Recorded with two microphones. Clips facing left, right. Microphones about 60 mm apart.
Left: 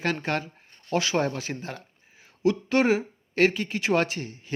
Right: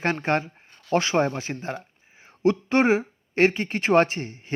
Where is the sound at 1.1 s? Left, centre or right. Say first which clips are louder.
Right 3 dB; right.